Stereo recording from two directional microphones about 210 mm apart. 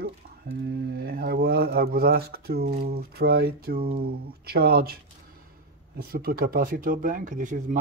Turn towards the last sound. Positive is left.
turn(degrees=-40)  # may be behind; listen again after turning